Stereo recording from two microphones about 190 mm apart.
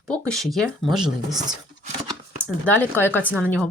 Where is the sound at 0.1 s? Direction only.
Centre (ahead or behind).